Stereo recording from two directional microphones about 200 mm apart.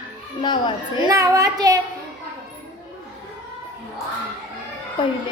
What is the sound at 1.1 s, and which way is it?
Speech, 15° right (ahead or behind).